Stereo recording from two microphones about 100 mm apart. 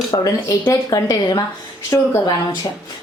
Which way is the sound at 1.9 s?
25° left (ahead or behind).